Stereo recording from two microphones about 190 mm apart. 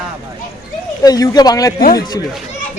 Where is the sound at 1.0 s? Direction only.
20° left (ahead or behind).